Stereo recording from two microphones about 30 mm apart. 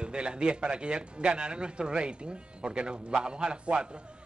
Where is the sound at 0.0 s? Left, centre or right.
Right.